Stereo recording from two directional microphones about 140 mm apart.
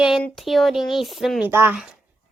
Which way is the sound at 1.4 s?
15° right (ahead or behind).